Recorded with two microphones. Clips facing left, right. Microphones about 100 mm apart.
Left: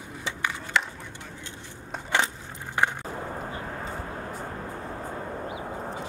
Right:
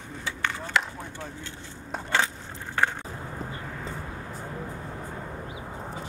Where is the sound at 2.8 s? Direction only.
15° left (ahead or behind).